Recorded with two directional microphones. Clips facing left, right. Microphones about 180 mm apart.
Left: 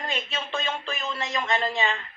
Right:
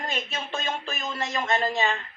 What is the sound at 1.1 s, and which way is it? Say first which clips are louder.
Speech: right 2 dB; 45° right (ahead or behind).